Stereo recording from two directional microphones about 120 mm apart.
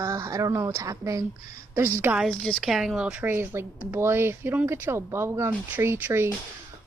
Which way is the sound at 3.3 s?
20° right (ahead or behind).